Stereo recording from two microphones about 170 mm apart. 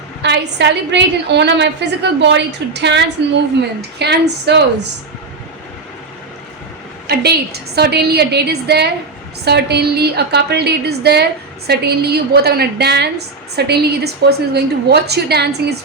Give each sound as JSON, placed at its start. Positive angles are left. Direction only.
{"t": 0.2, "sound": "a woman's voice", "side_deg": -90}
{"t": 7.1, "sound": "a woman's voice", "side_deg": -70}